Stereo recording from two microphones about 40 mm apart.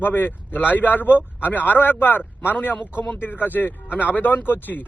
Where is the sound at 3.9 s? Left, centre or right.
Right.